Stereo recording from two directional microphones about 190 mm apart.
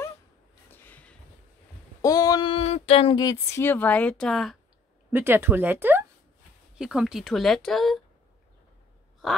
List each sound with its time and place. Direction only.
0.7 s a sound: 10° left (ahead or behind)
2.0 s speech: 20° left (ahead or behind); by 4.6 s centre (ahead or behind)
5.1 s speech: 10° right (ahead or behind)